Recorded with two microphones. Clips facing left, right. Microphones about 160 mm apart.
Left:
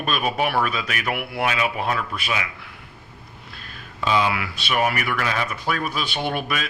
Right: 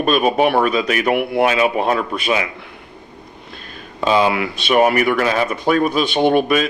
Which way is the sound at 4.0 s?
30° right (ahead or behind).